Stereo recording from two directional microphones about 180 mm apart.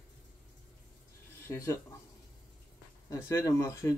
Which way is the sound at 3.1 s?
20° left (ahead or behind).